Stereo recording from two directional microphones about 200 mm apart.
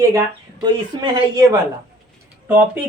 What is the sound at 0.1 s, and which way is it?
Speech, 20° right (ahead or behind).